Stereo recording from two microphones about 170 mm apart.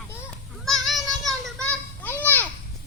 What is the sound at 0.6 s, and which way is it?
Children playing, centre (ahead or behind).